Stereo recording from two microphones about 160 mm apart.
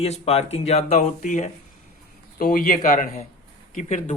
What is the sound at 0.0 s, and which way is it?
Speech, 40° left (ahead or behind).